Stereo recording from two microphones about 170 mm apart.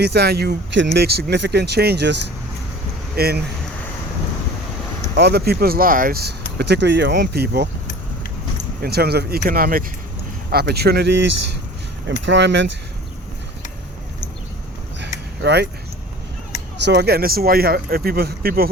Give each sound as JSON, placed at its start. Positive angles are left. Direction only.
{"t": 0.0, "sound": "speech", "side_deg": -70}
{"t": 3.2, "sound": "speech", "side_deg": -65}
{"t": 5.1, "sound": "speech", "side_deg": -75}
{"t": 8.8, "sound": "speech", "side_deg": -65}
{"t": 15.4, "sound": "speech", "side_deg": -75}
{"t": 16.8, "sound": "speech", "side_deg": -80}